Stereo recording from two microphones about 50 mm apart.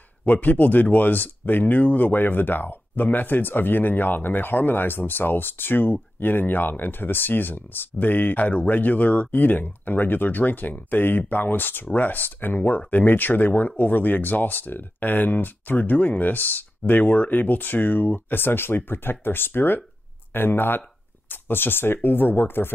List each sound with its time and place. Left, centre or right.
0.2 s speech: left